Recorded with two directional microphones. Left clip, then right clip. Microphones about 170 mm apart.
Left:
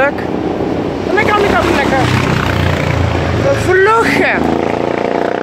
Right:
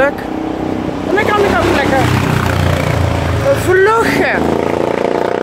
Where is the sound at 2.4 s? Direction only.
65° right (ahead or behind).